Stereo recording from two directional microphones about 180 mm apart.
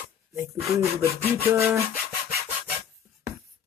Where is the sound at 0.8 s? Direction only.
15° right (ahead or behind).